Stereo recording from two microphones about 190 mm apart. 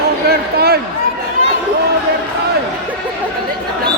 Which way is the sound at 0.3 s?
55° right (ahead or behind).